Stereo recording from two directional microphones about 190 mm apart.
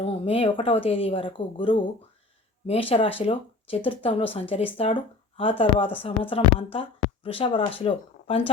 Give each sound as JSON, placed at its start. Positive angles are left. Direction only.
{"t": 0.0, "sound": "speech", "side_deg": 30}